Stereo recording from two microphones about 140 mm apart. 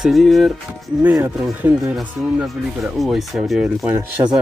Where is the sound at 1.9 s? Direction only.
Centre (ahead or behind).